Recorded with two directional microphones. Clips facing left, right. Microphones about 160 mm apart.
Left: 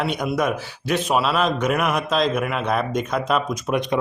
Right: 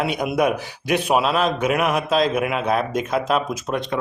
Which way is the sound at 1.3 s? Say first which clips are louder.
Right 1 dB; centre (ahead or behind).